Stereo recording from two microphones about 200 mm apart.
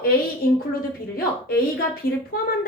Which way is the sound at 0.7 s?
50° left (ahead or behind).